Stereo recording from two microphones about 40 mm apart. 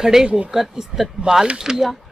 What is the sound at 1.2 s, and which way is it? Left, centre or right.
Speech, centre.